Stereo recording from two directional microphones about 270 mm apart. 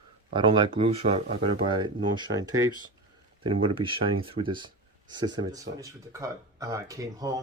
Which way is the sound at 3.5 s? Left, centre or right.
Centre.